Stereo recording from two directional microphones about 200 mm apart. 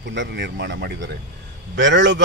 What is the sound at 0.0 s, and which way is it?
Speech, 65° right (ahead or behind).